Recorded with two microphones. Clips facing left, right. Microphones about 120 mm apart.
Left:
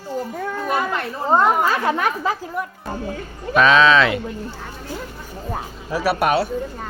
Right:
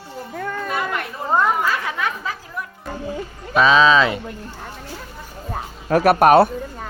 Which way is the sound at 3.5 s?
5° right (ahead or behind).